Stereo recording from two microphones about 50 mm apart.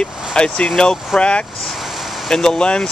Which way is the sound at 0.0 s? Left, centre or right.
Centre.